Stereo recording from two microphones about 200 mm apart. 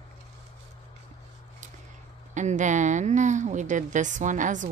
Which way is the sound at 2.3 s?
35° right (ahead or behind).